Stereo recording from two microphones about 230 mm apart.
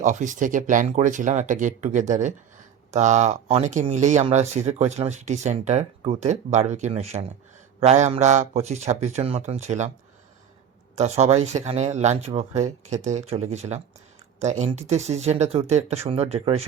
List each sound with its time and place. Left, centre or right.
0.0 s speech: right
10.9 s speech: right